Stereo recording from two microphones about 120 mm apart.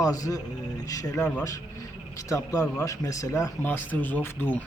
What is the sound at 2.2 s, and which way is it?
Speech, 25° left (ahead or behind).